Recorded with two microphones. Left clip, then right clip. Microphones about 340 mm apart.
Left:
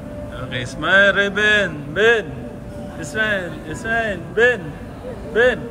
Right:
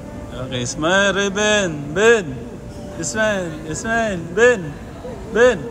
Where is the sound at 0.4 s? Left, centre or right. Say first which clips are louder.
Right 3 dB; centre.